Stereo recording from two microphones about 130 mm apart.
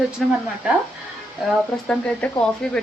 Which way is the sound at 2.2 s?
10° left (ahead or behind).